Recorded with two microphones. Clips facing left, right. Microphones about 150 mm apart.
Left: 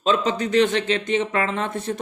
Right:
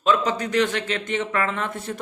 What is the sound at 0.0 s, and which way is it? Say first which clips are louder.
Speech: left 1 dB; 25° left (ahead or behind).